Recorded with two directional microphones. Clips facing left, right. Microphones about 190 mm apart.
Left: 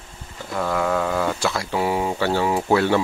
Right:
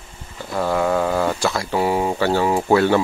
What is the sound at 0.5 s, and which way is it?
Speech, 30° right (ahead or behind).